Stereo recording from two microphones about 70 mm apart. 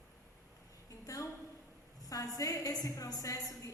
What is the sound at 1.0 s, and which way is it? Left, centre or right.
A woman's voice, left.